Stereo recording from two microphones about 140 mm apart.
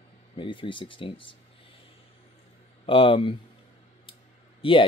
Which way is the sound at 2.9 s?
40° left (ahead or behind).